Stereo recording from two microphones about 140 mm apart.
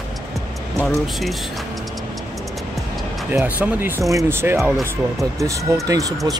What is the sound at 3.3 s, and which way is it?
Speech, 10° right (ahead or behind).